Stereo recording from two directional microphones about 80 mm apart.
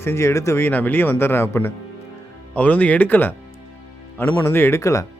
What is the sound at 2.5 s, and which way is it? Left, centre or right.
Speech, centre.